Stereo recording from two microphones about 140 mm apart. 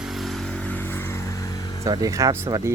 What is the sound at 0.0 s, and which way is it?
Vehicle, centre (ahead or behind).